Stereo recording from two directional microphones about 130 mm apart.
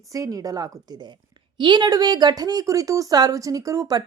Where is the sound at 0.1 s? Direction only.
25° right (ahead or behind).